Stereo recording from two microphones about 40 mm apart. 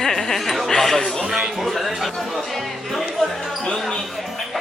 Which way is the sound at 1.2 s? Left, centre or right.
Centre.